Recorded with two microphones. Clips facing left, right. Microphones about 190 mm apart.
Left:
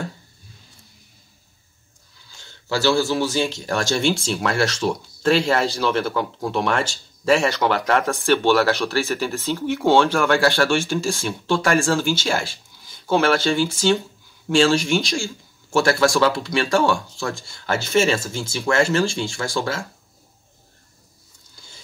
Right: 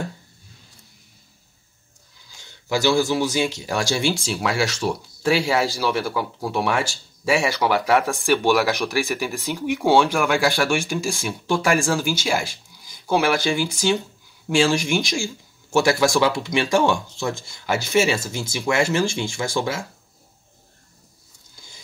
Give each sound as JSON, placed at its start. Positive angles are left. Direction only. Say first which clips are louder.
{"t": 2.3, "sound": "speech", "louder": "right 1 dB", "side_deg": -15}